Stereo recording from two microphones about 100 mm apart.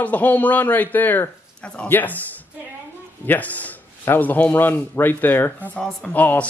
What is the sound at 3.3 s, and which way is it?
Speech, 15° left (ahead or behind).